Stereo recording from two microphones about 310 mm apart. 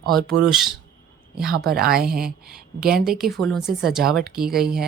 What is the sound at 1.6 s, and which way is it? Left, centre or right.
A woman's voice, right.